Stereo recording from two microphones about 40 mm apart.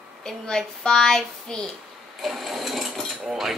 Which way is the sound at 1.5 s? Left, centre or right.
Left.